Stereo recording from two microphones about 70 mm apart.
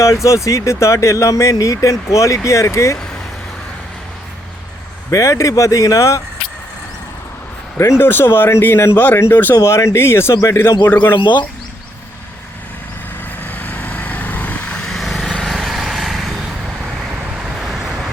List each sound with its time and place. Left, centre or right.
0.0 s speech: left
5.1 s speech: left
7.8 s speech: left
9.6 s speech: left
10.8 s speech: left
11.1 s speech: left
13.5 s vehicle: left
14.8 s vehicle: centre